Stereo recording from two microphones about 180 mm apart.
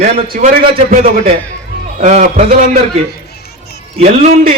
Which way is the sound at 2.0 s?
45° right (ahead or behind).